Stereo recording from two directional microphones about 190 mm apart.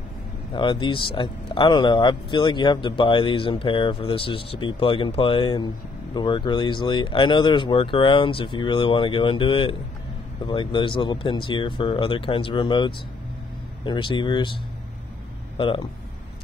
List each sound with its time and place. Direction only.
0.5 s speech: 25° left (ahead or behind)
15.5 s speech: 25° left (ahead or behind)